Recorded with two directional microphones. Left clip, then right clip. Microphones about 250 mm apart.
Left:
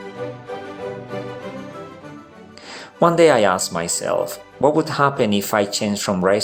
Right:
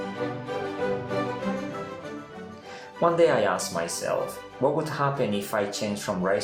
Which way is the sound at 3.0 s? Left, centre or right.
Left.